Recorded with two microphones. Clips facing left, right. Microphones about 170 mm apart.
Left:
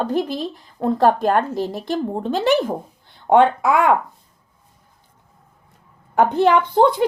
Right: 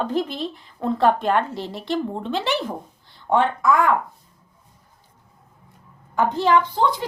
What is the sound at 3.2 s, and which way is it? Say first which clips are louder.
Speech: left 5 dB; 70° left (ahead or behind).